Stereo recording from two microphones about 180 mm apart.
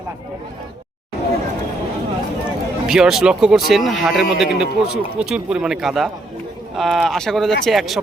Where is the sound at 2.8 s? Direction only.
5° right (ahead or behind).